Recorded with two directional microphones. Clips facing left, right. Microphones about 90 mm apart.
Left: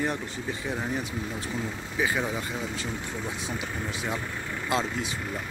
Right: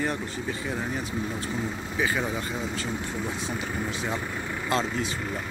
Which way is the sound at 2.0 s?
5° left (ahead or behind).